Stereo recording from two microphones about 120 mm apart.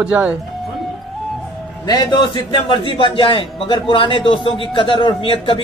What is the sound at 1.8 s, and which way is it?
A man's voice, 35° left (ahead or behind).